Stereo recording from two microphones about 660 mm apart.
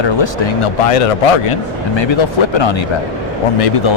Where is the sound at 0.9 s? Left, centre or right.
Left.